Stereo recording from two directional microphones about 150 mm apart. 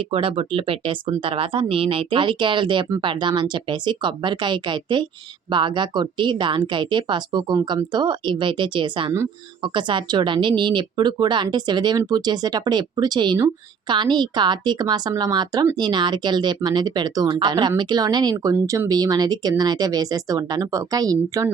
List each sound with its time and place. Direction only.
0.0 s speech: 35° right (ahead or behind)